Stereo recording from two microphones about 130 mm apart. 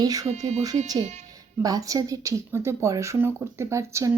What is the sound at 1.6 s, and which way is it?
Speech, 25° right (ahead or behind).